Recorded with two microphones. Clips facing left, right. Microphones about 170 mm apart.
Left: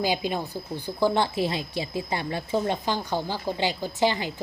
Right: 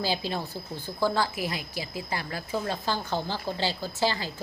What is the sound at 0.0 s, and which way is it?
A woman's voice, 15° left (ahead or behind).